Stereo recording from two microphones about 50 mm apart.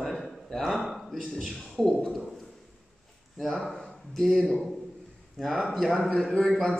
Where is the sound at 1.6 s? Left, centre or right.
Centre.